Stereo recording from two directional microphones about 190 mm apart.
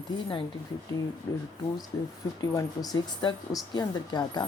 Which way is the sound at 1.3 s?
15° left (ahead or behind).